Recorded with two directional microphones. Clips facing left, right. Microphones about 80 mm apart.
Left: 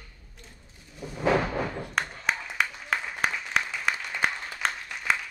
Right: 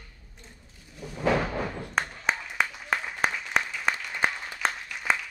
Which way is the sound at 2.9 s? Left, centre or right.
Centre.